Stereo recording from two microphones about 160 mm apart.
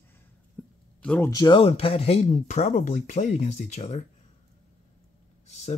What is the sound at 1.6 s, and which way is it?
Speech, 35° left (ahead or behind).